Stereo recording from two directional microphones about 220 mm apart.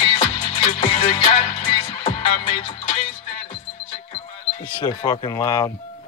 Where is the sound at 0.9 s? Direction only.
30° left (ahead or behind).